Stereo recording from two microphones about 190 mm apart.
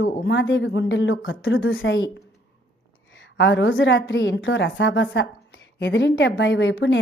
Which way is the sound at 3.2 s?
70° left (ahead or behind).